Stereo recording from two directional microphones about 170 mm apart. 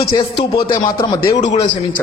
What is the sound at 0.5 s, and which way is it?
Speech, 30° left (ahead or behind).